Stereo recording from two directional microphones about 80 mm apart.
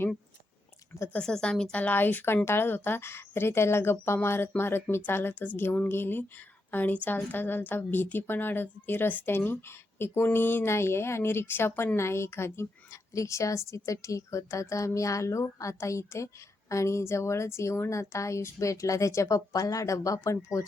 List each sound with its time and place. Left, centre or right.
1.2 s a woman's voice: centre; by 20.7 s left